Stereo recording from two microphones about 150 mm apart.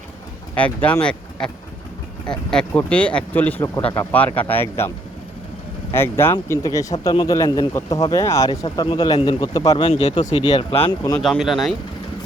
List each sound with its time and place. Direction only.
0.5 s speech: 10° left (ahead or behind)
5.9 s a man's voice: 15° left (ahead or behind)
9.8 s speech: 45° left (ahead or behind)
10.3 s speech: 30° left (ahead or behind)
11.2 s speech: centre (ahead or behind)